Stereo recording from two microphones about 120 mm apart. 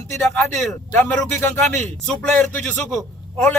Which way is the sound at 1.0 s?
15° left (ahead or behind).